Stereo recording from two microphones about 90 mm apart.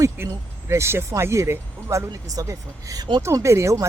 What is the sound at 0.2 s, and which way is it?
Speech, 25° right (ahead or behind).